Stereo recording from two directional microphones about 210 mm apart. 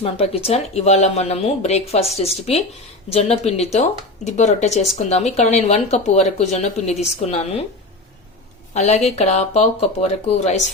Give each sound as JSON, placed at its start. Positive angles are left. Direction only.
{"t": 0.0, "sound": "speech", "side_deg": 30}
{"t": 8.7, "sound": "speech", "side_deg": 30}